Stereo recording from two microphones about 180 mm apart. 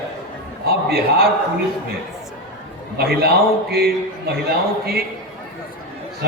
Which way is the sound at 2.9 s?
60° right (ahead or behind).